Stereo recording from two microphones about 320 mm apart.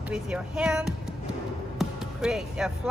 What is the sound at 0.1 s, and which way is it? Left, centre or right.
A woman's voice, centre.